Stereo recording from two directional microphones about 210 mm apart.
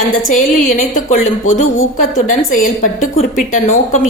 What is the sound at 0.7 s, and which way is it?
A woman's voice, 35° left (ahead or behind).